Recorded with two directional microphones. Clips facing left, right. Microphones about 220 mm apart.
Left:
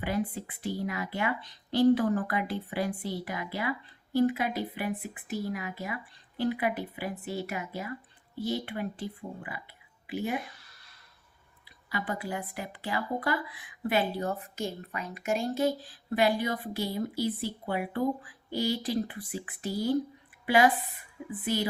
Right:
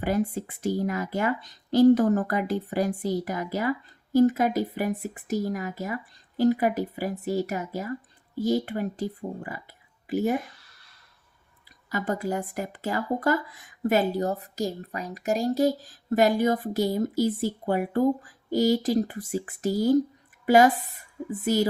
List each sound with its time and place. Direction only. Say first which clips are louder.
0.0 s speech: right 5 dB; 45° right (ahead or behind)
11.9 s a woman's voice: right 6 dB; 45° right (ahead or behind)